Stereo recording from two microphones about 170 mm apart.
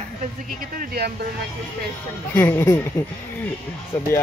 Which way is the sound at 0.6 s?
60° right (ahead or behind).